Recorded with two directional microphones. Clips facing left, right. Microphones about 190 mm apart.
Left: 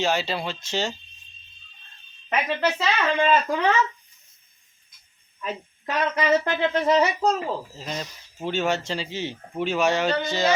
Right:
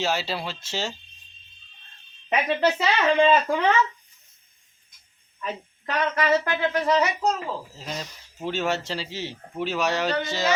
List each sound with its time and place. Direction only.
0.0 s speech: 5° right (ahead or behind)
2.7 s speech: 15° right (ahead or behind)
5.4 s speech: 10° left (ahead or behind); by 7.4 s 30° left (ahead or behind)
7.8 s speech: centre (ahead or behind)